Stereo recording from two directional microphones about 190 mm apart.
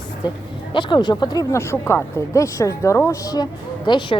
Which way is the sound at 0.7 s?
25° left (ahead or behind).